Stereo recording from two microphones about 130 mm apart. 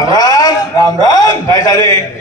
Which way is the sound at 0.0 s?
30° left (ahead or behind).